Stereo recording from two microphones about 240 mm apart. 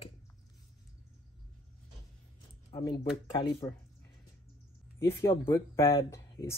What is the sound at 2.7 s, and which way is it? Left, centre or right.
Speech, left.